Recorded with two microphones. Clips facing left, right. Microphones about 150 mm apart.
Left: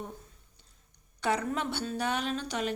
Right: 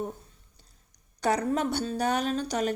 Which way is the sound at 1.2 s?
40° right (ahead or behind).